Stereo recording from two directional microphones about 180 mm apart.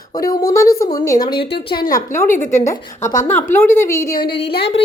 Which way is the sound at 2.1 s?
15° left (ahead or behind).